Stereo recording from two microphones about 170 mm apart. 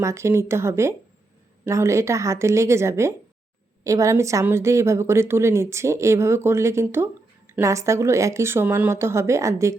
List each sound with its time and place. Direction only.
0.0 s a woman's voice: 15° right (ahead or behind)